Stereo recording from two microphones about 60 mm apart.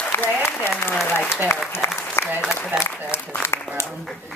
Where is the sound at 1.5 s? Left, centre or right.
Left.